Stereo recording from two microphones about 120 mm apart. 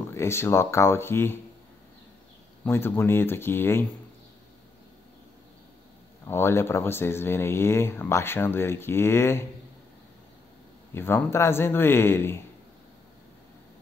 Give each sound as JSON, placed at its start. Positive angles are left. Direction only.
{"t": 0.1, "sound": "speech", "side_deg": 20}
{"t": 2.6, "sound": "speech", "side_deg": 20}
{"t": 6.2, "sound": "speech", "side_deg": 20}
{"t": 10.9, "sound": "speech", "side_deg": 20}